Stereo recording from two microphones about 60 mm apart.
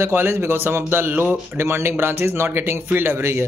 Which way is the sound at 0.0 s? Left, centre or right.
Right.